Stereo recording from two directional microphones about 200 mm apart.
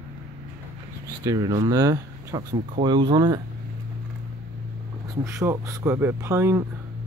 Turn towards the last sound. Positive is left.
turn(degrees=-15)  # may be behind; listen again after turning